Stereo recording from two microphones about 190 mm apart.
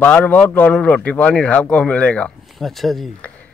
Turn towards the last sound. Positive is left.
turn(degrees=0)  # may be behind; listen again after turning